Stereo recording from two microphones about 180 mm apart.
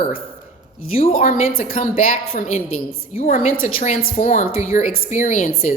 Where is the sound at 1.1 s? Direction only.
50° left (ahead or behind).